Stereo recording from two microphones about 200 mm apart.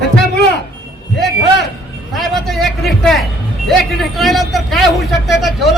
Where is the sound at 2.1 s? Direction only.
Centre (ahead or behind).